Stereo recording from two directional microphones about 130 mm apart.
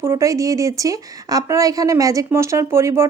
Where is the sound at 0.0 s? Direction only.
20° right (ahead or behind).